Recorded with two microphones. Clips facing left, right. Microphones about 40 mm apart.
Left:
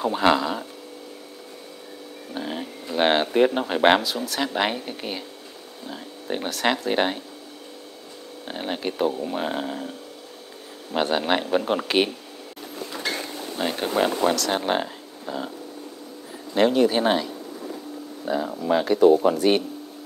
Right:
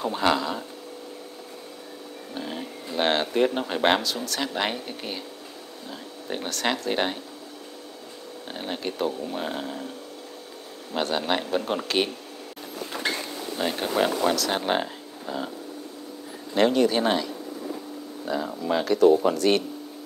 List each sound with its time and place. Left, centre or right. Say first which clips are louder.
0.0 s speech: left 3 dB; centre
2.3 s speech: left 3 dB; centre
8.5 s speech: left 3 dB; centre
12.9 s a sound: right 1 dB; right
13.6 s speech: left 1 dB; centre
16.5 s speech: left 2 dB; centre